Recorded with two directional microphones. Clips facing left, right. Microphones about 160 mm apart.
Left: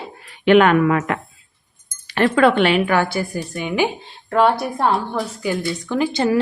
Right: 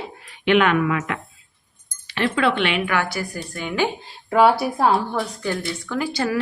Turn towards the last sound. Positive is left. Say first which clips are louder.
# left 5 dB
turn(degrees=20)  # may be behind; listen again after turning